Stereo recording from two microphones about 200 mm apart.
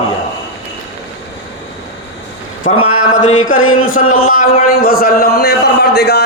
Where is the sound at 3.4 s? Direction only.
90° left.